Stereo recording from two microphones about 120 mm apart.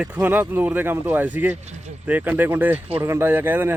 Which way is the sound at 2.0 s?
15° right (ahead or behind).